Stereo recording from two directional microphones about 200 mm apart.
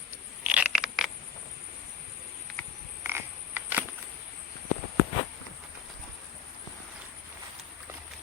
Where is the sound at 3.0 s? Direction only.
10° right (ahead or behind).